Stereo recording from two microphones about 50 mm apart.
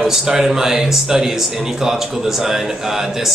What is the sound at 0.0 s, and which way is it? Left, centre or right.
Speech, centre.